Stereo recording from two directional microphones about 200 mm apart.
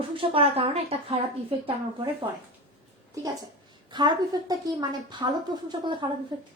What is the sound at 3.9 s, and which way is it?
A woman's voice, 20° right (ahead or behind).